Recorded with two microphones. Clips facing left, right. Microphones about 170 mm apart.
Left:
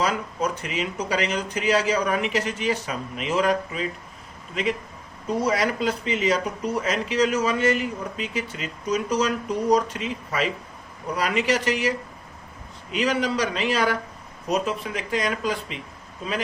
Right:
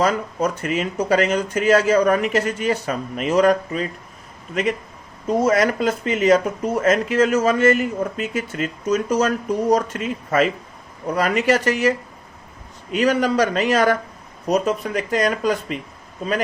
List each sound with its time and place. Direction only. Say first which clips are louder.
0.0 s speech: right 5 dB; 45° right (ahead or behind)
5.3 s speech: right 6 dB; 50° right (ahead or behind)